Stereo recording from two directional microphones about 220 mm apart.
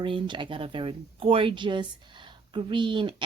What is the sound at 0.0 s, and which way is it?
Speech, 20° right (ahead or behind).